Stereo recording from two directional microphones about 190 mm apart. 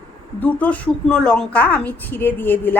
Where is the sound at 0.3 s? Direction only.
10° left (ahead or behind).